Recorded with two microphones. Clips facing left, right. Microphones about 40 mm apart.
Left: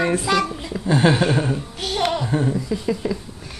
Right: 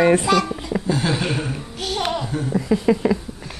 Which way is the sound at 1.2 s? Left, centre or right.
Centre.